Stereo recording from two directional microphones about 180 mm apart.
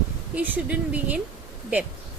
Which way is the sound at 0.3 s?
10° right (ahead or behind).